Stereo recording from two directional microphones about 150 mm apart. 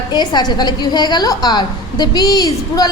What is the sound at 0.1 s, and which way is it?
A woman's voice, 30° left (ahead or behind).